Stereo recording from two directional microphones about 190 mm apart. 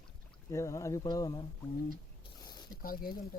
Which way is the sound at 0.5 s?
15° left (ahead or behind).